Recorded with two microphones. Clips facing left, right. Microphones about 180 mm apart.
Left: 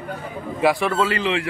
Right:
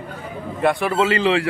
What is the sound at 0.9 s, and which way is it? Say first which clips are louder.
Speech: right 3 dB; 25° right (ahead or behind).